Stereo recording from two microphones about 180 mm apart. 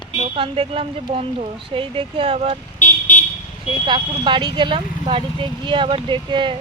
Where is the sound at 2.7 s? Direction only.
45° left (ahead or behind).